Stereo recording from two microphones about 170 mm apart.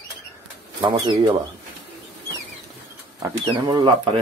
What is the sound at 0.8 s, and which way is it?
Speech, 30° right (ahead or behind).